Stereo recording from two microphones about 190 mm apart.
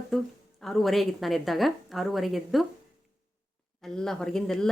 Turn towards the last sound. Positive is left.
turn(degrees=0)  # may be behind; listen again after turning